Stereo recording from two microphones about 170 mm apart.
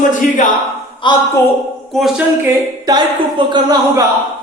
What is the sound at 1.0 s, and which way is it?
Speech, 30° left (ahead or behind).